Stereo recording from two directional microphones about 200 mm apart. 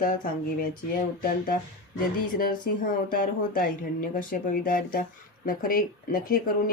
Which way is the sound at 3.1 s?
45° left (ahead or behind).